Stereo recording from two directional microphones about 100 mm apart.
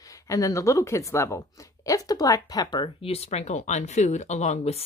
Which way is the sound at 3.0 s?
90° left.